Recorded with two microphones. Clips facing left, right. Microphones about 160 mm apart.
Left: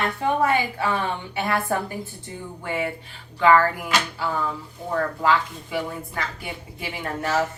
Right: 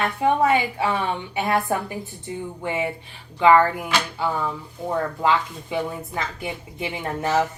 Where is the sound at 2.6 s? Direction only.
20° right (ahead or behind).